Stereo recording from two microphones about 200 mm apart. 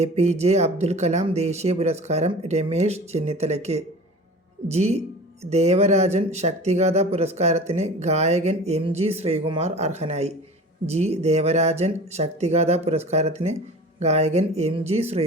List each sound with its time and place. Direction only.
0.0 s speech: 35° right (ahead or behind)